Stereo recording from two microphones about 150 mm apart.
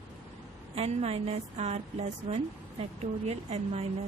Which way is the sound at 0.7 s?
45° right (ahead or behind).